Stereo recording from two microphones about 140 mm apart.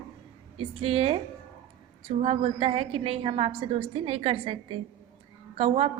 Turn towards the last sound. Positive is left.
turn(degrees=-45)  # may be behind; listen again after turning